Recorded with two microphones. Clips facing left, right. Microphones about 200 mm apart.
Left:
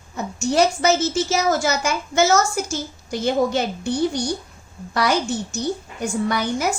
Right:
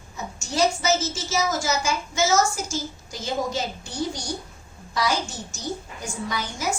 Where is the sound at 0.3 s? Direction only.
60° left (ahead or behind).